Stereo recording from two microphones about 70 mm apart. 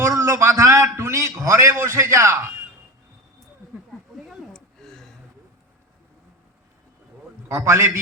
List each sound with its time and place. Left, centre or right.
0.0 s a sound: right
1.4 s a man's voice: right
4.3 s gasp: centre
7.4 s a man's voice: right